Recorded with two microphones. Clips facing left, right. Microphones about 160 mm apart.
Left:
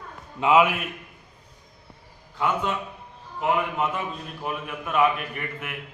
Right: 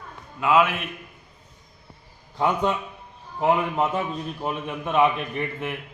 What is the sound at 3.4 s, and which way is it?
A man's voice, 30° right (ahead or behind).